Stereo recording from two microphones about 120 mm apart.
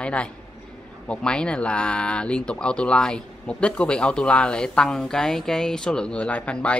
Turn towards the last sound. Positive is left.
turn(degrees=10)  # may be behind; listen again after turning